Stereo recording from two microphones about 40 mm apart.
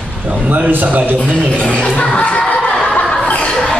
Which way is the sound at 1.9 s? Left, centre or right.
Left.